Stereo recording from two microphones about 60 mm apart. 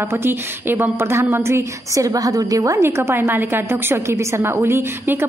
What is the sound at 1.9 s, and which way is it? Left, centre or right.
Speech, right.